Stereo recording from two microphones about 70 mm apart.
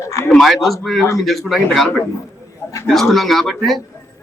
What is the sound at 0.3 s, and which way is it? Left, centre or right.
Speech, centre.